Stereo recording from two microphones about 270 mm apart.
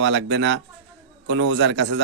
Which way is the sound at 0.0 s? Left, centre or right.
Right.